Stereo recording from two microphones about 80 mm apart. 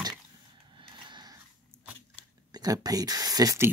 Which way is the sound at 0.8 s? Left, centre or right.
Right.